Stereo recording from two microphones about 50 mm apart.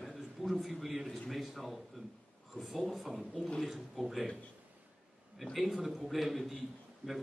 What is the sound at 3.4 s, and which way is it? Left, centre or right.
Speech, centre.